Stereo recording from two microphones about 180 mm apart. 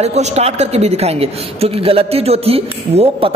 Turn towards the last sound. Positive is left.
turn(degrees=-35)  # may be behind; listen again after turning